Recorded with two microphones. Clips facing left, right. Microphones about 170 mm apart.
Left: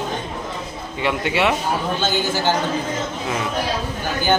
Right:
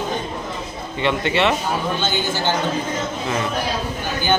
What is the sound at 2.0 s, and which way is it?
Speech, 40° left (ahead or behind).